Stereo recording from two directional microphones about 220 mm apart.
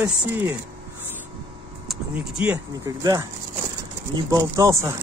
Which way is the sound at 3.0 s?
15° right (ahead or behind).